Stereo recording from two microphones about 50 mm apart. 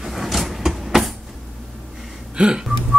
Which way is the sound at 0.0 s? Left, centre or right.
Centre.